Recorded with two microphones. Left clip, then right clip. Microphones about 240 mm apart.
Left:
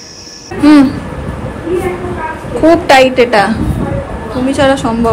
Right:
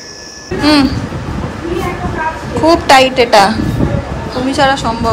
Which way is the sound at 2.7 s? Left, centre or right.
Centre.